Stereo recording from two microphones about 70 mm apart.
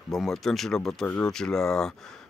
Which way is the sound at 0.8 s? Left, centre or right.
Centre.